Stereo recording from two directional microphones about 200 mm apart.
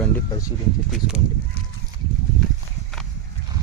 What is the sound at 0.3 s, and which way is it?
Speech, 15° left (ahead or behind).